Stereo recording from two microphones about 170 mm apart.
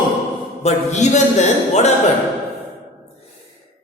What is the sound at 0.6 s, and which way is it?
A man's voice, 45° left (ahead or behind).